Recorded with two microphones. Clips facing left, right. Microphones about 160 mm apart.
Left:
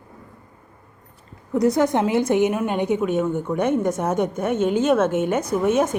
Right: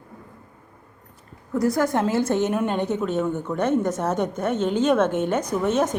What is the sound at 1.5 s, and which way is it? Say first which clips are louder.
A woman's voice: left 3 dB; 20° left (ahead or behind).